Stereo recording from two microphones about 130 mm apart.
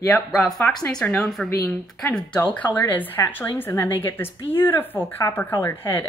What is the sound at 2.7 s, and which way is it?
A woman's voice, 15° left (ahead or behind).